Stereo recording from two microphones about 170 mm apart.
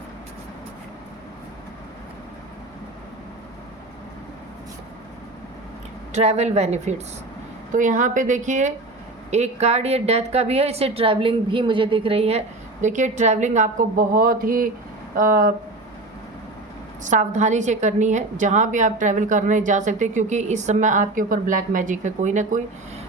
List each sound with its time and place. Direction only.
6.1 s a woman's voice: 40° right (ahead or behind)
12.8 s a woman's voice: 45° right (ahead or behind)
17.0 s a woman's voice: 45° right (ahead or behind)